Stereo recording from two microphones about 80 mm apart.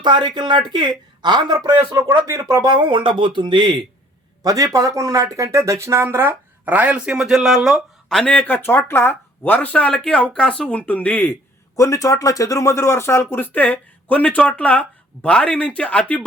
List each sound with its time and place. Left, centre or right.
0.0 s speech: right
2.6 s speech: right
4.4 s speech: right
6.7 s speech: centre
8.1 s speech: centre
11.8 s speech: left; by 16.2 s centre